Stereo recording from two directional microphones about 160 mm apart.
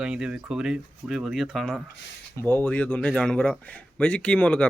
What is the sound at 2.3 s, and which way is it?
A man's voice, 15° left (ahead or behind).